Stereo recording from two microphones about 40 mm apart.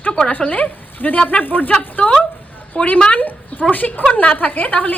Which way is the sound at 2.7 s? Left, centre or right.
Left.